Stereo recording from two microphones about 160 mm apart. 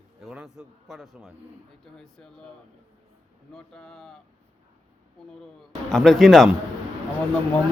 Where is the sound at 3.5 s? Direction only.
5° left (ahead or behind).